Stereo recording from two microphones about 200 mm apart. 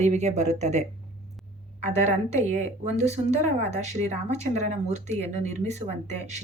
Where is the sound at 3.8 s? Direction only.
35° right (ahead or behind).